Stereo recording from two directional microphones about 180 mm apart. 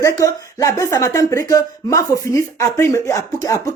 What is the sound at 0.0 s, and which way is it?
Speech, 15° left (ahead or behind).